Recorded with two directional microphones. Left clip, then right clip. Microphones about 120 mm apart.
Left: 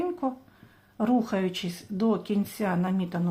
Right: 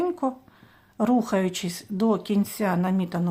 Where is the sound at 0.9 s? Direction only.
35° right (ahead or behind).